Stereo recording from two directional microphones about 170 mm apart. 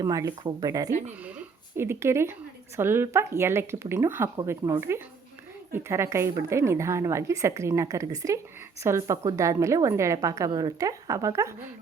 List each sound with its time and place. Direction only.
0.0 s a woman's voice: 20° right (ahead or behind)